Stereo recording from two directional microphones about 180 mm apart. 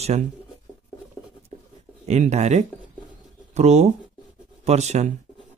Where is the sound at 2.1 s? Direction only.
40° right (ahead or behind).